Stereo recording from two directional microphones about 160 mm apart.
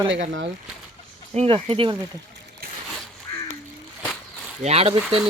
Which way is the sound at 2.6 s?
70° right (ahead or behind).